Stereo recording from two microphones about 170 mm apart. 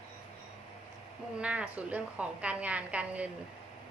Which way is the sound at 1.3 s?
5° right (ahead or behind).